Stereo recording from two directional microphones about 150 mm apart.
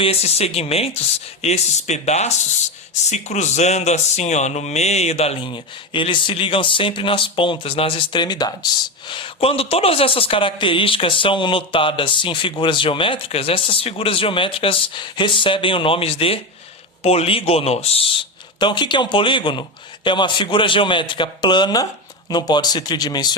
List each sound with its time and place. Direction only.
0.0 s a man's voice: 45° left (ahead or behind)